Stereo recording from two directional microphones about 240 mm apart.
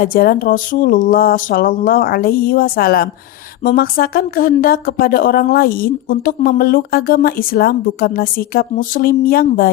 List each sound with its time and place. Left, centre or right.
0.0 s speech: left